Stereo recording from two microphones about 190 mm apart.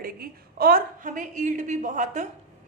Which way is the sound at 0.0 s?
50° right (ahead or behind).